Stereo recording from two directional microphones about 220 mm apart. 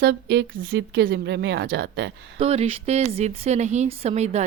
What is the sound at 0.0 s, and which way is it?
Speech, 45° right (ahead or behind).